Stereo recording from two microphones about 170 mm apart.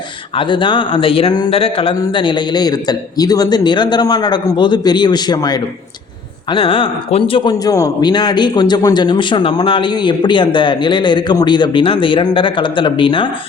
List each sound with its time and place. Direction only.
0.3 s speech: 30° left (ahead or behind)